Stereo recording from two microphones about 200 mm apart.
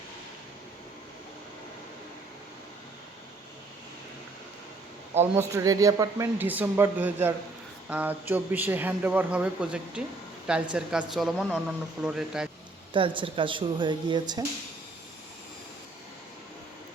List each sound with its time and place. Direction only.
5.1 s a woman's voice: 10° right (ahead or behind)
12.9 s speech: 25° right (ahead or behind)